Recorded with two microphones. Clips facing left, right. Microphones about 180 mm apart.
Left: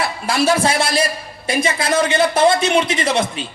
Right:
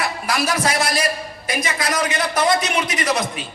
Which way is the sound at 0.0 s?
30° left (ahead or behind).